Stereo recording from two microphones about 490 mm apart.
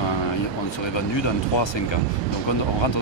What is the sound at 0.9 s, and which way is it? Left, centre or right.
Speech, left.